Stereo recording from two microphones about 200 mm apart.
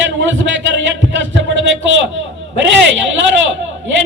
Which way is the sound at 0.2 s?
70° right (ahead or behind).